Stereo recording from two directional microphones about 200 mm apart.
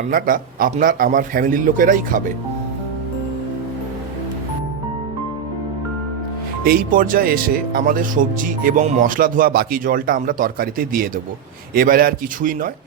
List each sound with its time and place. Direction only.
0.1 s speech: 45° right (ahead or behind)
6.7 s speech: 45° right (ahead or behind)